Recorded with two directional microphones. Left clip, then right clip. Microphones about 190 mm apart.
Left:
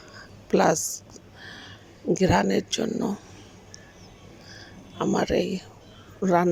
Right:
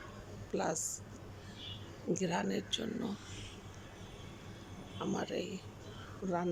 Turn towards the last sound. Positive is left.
turn(degrees=40)  # may be behind; listen again after turning